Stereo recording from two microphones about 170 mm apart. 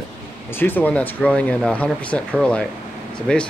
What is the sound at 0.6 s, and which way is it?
Speech, 10° left (ahead or behind).